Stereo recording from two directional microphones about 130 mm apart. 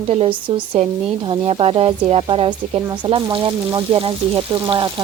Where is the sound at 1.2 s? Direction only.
40° right (ahead or behind).